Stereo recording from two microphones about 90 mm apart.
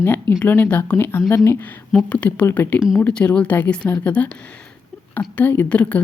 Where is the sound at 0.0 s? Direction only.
25° left (ahead or behind).